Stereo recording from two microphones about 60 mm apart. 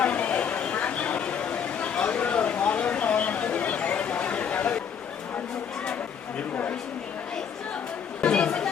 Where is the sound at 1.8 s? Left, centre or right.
Centre.